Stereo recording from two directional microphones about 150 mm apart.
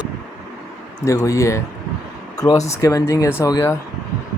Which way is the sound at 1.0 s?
20° left (ahead or behind).